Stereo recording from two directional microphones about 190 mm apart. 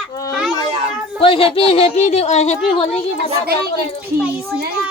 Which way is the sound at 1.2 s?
30° left (ahead or behind).